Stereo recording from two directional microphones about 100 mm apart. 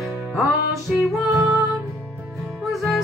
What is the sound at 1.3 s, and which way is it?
Music, 30° right (ahead or behind).